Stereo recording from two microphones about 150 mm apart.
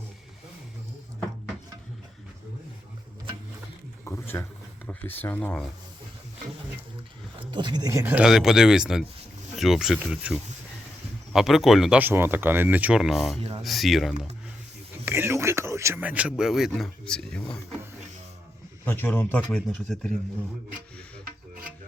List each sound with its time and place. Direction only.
4.0 s a sound: 10° left (ahead or behind)
4.9 s speech: 10° left (ahead or behind)
7.3 s speech: 30° right (ahead or behind)
8.1 s speech: 5° right (ahead or behind)
15.0 s a sound: 15° right (ahead or behind)
16.4 s speech: 5° right (ahead or behind)
18.9 s speech: 10° left (ahead or behind)